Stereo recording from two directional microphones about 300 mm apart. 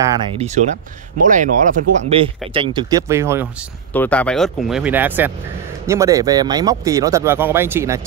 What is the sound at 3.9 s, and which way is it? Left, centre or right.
Speech, centre.